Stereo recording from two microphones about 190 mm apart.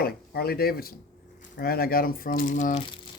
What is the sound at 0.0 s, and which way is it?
Speech, 55° left (ahead or behind).